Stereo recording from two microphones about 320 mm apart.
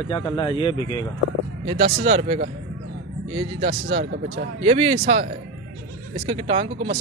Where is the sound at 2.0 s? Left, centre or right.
Centre.